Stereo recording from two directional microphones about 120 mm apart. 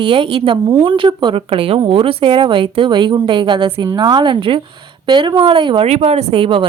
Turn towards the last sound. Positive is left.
turn(degrees=-50)  # may be behind; listen again after turning